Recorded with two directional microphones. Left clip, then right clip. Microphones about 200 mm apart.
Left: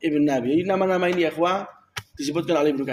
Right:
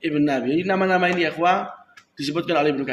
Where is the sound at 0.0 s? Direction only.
45° left (ahead or behind).